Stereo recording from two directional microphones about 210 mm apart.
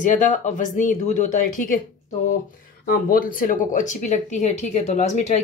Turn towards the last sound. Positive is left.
turn(degrees=35)  # may be behind; listen again after turning